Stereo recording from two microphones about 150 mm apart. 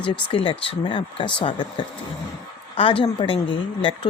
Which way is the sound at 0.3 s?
40° left (ahead or behind).